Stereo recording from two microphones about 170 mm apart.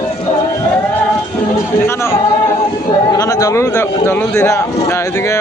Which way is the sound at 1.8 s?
15° left (ahead or behind).